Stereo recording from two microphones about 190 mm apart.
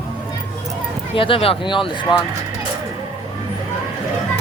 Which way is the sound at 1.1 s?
25° left (ahead or behind).